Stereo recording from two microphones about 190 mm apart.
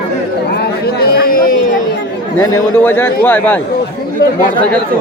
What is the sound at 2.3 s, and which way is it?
A man's voice, 15° left (ahead or behind).